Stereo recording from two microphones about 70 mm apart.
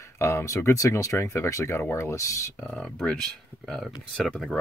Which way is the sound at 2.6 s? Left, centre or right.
Centre.